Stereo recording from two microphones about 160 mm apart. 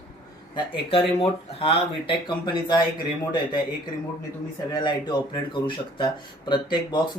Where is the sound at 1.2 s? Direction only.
35° left (ahead or behind).